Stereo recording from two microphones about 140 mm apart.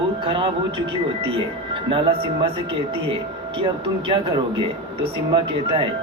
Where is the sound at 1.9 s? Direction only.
40° right (ahead or behind).